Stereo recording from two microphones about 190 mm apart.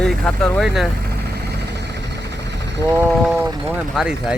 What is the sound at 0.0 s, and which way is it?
Speech, 5° left (ahead or behind).